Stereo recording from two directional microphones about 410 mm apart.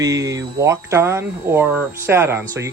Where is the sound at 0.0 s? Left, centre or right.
Centre.